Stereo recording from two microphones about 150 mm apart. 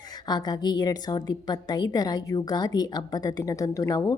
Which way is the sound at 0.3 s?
25° left (ahead or behind).